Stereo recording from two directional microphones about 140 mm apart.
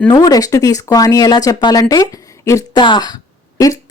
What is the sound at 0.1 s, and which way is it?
Speech, 25° left (ahead or behind).